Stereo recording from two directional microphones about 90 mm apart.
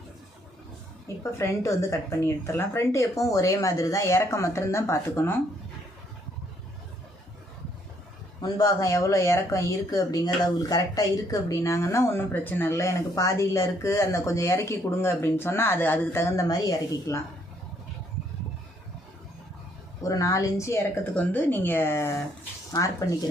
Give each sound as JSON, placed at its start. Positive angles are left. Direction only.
{"t": 1.0, "sound": "speech", "side_deg": 35}
{"t": 8.4, "sound": "speech", "side_deg": 40}
{"t": 20.0, "sound": "speech", "side_deg": 40}
{"t": 21.2, "sound": "speech", "side_deg": 20}
{"t": 22.7, "sound": "speech", "side_deg": 40}